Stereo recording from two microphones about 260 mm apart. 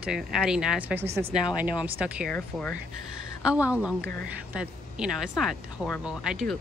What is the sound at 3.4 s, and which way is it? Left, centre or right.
A woman's voice, centre.